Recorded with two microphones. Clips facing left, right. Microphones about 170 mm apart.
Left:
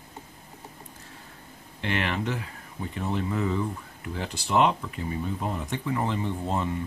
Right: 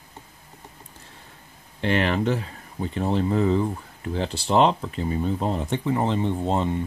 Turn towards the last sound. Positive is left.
turn(degrees=-25)  # may be behind; listen again after turning